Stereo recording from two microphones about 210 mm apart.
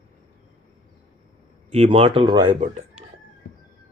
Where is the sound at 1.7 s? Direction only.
30° right (ahead or behind).